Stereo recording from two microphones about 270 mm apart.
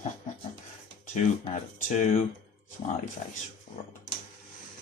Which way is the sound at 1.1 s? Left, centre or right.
Left.